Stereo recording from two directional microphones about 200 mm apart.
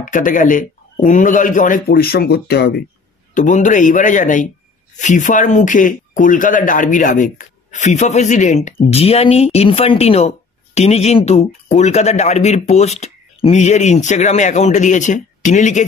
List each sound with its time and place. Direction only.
0.0 s speech: 40° left (ahead or behind)
3.3 s speech: 40° left (ahead or behind)